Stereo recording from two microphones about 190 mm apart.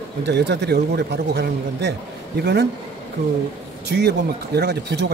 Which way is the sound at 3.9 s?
60° right (ahead or behind).